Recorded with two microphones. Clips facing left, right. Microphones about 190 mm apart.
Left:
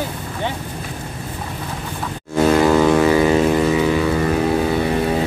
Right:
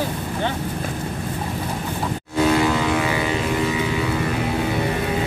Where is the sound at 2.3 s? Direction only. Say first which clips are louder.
Left 5 dB; 45° left (ahead or behind).